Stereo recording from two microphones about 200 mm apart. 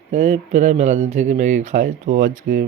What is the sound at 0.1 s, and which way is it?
Speech, 35° right (ahead or behind).